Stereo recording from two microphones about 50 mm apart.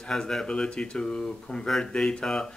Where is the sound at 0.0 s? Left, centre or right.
Centre.